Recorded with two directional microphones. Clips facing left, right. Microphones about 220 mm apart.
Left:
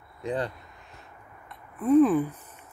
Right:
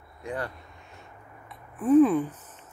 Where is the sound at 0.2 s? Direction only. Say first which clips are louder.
Left 4 dB; 20° left (ahead or behind).